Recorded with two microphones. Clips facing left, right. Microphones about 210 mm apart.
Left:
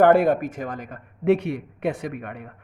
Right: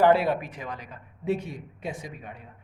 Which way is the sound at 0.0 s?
50° left (ahead or behind).